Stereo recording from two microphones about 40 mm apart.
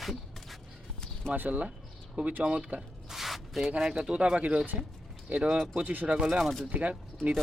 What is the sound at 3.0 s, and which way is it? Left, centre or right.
Spray, centre.